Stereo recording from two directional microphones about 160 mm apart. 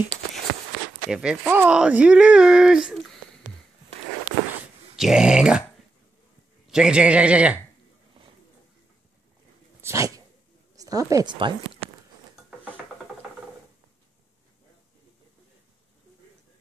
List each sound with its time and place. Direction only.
1.1 s speech: 5° right (ahead or behind)
4.9 s speech: 5° right (ahead or behind)
6.7 s a man's voice: 5° right (ahead or behind)
9.8 s dog: 15° right (ahead or behind)
10.8 s speech: 20° right (ahead or behind)
11.3 s speech: 35° right (ahead or behind)